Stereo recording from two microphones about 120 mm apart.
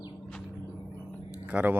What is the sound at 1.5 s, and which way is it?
Speech, 10° right (ahead or behind).